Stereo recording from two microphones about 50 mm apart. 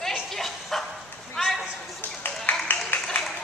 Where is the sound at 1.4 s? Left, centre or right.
Centre.